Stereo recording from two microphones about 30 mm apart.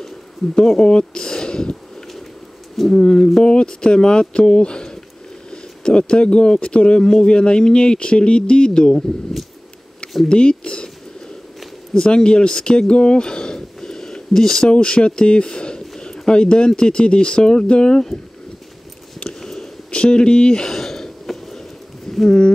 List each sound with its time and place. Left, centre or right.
0.6 s speech: left
2.9 s speech: left
7.0 s speech: centre
7.2 s speech: left
10.3 s speech: left
11.9 s speech: left
13.7 s a sound: centre
14.7 s speech: left
19.2 s a sound: centre
19.9 s speech: left
20.6 s a sound: centre